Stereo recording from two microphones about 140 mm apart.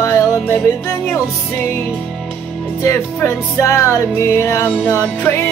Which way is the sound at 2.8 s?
20° left (ahead or behind).